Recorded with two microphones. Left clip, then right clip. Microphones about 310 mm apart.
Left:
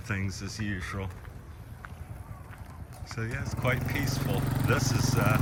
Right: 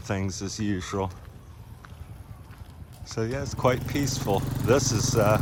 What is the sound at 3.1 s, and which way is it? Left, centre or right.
Speech, centre.